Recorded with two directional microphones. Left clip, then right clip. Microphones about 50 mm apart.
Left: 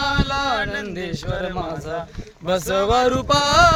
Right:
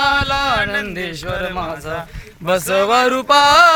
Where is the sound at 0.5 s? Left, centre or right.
Left.